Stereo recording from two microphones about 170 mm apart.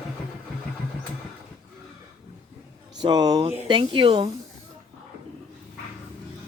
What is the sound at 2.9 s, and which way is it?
Speech, 25° right (ahead or behind).